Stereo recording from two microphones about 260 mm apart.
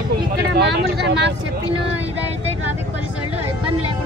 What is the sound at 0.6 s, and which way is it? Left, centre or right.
Speech, right.